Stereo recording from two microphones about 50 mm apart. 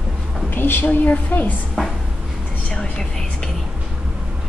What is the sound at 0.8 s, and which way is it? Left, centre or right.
Speech, left.